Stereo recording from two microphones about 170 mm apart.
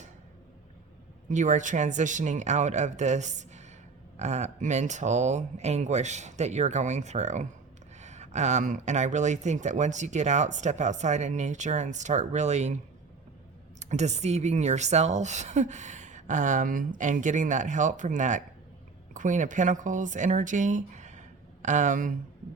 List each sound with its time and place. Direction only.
1.3 s speech: 45° right (ahead or behind)
13.7 s speech: 40° right (ahead or behind)